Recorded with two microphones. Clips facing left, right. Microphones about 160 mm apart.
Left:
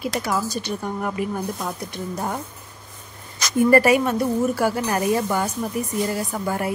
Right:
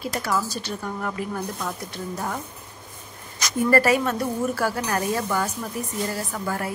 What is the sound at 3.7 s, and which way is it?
Speech, 15° left (ahead or behind).